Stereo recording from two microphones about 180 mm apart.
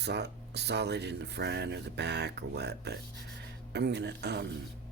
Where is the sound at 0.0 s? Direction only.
65° right (ahead or behind).